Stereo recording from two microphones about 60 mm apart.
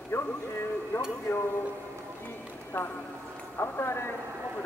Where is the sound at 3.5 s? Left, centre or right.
Left.